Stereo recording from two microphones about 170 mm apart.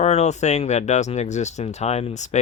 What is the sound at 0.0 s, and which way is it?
Speech, 40° left (ahead or behind).